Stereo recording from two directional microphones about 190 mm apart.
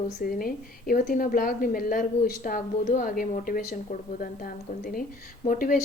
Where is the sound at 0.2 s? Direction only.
50° left (ahead or behind).